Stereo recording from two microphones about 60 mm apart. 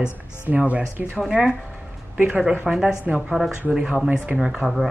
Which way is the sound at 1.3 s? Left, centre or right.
Centre.